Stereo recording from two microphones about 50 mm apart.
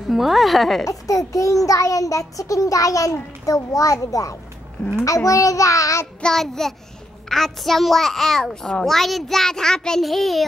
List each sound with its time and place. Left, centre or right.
0.1 s speech: centre
0.8 s child singing: left
6.2 s a child's voice: centre
10.0 s speech: centre